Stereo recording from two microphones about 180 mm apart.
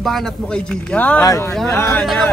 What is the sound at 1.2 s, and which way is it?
Speech, 20° left (ahead or behind).